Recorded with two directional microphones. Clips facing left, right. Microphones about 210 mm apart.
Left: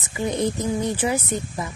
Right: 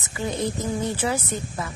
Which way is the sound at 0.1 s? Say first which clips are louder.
Left 3 dB; 20° left (ahead or behind).